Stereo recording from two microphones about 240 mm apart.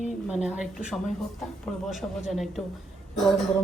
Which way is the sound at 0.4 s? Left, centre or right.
Centre.